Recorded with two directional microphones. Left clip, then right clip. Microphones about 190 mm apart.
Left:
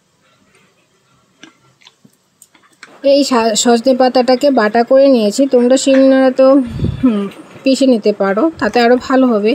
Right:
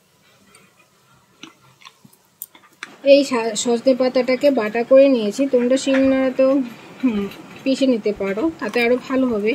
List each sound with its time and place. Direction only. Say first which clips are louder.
3.0 s a woman's voice: left 3 dB; 35° left (ahead or behind)
7.6 s a woman's voice: left 7 dB; 30° left (ahead or behind)